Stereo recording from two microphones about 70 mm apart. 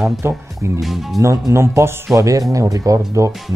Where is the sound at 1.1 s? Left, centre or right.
Right.